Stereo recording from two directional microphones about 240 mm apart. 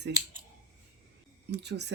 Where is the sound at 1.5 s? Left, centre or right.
Right.